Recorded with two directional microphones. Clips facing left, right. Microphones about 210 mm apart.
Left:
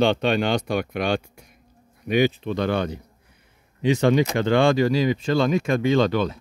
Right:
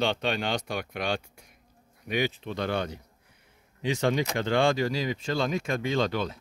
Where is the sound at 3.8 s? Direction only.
75° left (ahead or behind).